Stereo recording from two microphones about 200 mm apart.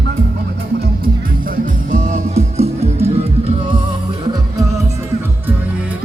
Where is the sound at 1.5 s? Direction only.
40° right (ahead or behind).